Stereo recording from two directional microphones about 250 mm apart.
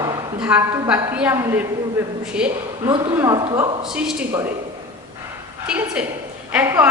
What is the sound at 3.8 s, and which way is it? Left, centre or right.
Speech, centre.